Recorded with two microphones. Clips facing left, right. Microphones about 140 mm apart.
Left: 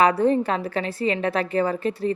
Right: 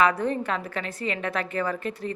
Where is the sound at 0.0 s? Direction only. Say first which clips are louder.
Left 5 dB; 30° left (ahead or behind).